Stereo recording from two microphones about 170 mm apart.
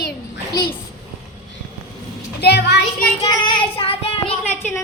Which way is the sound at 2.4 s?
75° left (ahead or behind).